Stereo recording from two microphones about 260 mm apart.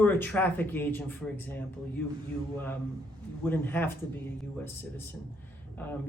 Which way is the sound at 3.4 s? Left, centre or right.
Centre.